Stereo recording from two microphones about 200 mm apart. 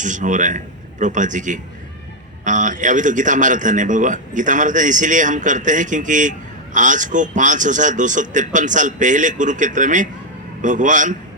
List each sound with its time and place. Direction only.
0.0 s a man's voice: 40° right (ahead or behind)